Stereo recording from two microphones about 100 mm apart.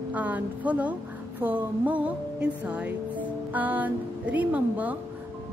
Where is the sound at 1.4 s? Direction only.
20° right (ahead or behind).